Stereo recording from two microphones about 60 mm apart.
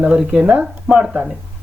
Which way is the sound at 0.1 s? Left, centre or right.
Centre.